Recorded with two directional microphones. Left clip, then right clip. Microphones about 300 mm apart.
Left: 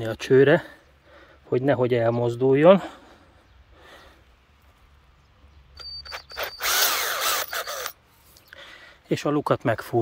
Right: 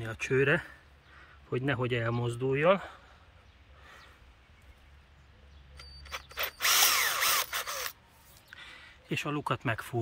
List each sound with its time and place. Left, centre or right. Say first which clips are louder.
0.0 s speech: left 11 dB; centre
5.8 s drill: left 7 dB; centre
8.4 s a sound: left 5 dB; centre